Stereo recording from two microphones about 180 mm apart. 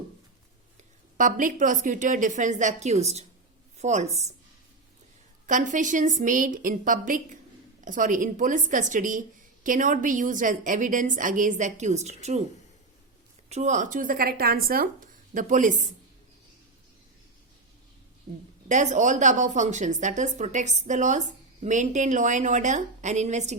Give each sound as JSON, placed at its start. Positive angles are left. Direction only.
{"t": 1.1, "sound": "a woman's voice", "side_deg": -45}
{"t": 5.5, "sound": "a woman's voice", "side_deg": -45}
{"t": 13.5, "sound": "a woman's voice", "side_deg": -40}
{"t": 18.7, "sound": "a woman's voice", "side_deg": -40}